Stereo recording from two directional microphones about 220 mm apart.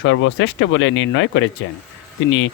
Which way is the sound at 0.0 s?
60° left (ahead or behind).